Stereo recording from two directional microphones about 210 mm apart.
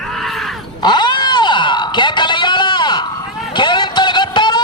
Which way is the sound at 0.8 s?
20° left (ahead or behind).